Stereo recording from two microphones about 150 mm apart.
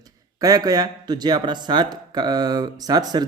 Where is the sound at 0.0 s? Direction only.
25° right (ahead or behind).